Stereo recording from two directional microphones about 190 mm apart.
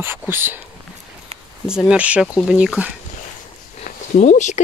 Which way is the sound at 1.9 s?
5° right (ahead or behind).